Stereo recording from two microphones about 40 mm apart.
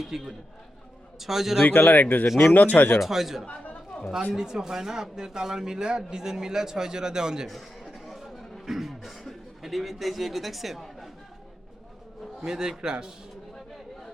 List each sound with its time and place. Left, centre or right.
0.1 s speech: centre
1.6 s speech: left
3.0 s speech: centre
3.9 s a sound: left
4.4 s speech: centre
8.0 s chatter: centre
8.6 s a man's voice: centre
12.4 s speech: centre